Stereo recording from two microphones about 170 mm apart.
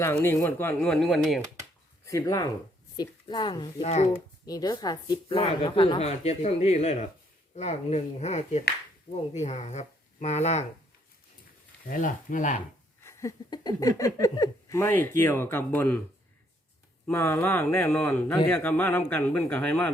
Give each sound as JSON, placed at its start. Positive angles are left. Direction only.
{"t": 0.0, "sound": "speech", "side_deg": 15}
{"t": 2.0, "sound": "a woman's voice", "side_deg": 20}
{"t": 3.8, "sound": "a woman's voice", "side_deg": 40}
{"t": 4.4, "sound": "a woman's voice", "side_deg": 20}
{"t": 11.9, "sound": "speech", "side_deg": 50}
{"t": 13.1, "sound": "speech", "side_deg": 20}
{"t": 17.1, "sound": "speech", "side_deg": 15}